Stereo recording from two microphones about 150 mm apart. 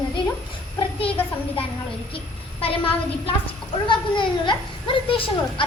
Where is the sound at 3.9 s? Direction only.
30° left (ahead or behind).